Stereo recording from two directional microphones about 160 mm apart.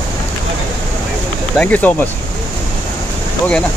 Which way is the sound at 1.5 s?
10° left (ahead or behind).